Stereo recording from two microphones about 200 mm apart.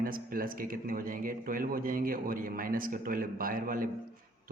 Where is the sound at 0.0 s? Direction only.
45° right (ahead or behind).